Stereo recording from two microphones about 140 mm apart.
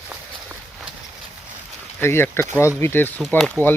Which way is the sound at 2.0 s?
15° left (ahead or behind).